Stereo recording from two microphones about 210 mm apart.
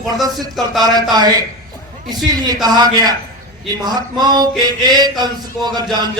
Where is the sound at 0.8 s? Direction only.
20° right (ahead or behind).